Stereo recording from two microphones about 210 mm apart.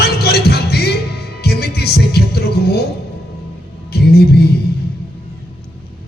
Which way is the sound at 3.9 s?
50° left (ahead or behind).